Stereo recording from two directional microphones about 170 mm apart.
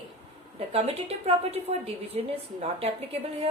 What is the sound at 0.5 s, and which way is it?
A woman's voice, 35° right (ahead or behind).